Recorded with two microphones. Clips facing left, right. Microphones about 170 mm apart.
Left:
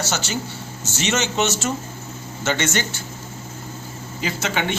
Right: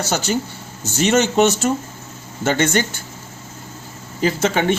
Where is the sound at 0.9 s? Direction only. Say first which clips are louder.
Right 7 dB; 55° right (ahead or behind).